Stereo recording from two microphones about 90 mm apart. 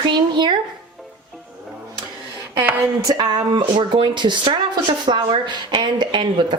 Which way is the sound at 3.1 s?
55° right (ahead or behind).